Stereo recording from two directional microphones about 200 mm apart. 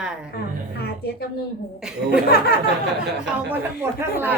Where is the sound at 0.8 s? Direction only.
55° left (ahead or behind).